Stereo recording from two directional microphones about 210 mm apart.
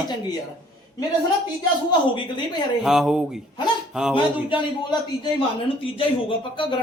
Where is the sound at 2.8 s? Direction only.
Centre (ahead or behind).